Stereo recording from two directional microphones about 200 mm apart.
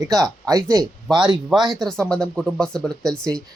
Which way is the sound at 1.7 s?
Centre (ahead or behind).